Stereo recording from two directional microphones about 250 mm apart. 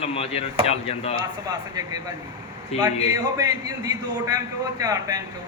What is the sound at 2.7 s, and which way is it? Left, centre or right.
Speech, left.